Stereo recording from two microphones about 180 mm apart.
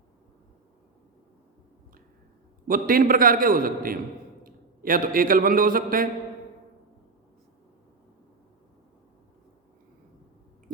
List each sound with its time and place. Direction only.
2.6 s a man's voice: 50° right (ahead or behind)